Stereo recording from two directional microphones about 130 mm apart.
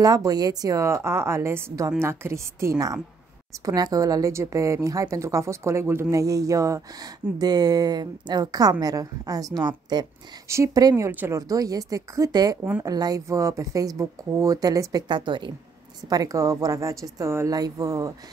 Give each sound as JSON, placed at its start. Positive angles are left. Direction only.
{"t": 0.0, "sound": "a woman's voice", "side_deg": -30}
{"t": 11.1, "sound": "a woman's voice", "side_deg": -15}